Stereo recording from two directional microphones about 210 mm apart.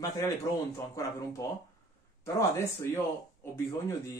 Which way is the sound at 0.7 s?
15° left (ahead or behind).